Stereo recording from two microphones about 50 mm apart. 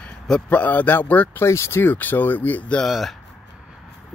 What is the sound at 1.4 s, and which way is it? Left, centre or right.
Speech, left.